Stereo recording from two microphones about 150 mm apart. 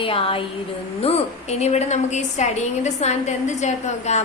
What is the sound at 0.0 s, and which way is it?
A woman's voice, 40° left (ahead or behind).